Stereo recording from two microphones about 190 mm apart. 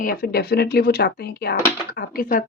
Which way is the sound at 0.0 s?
50° left (ahead or behind).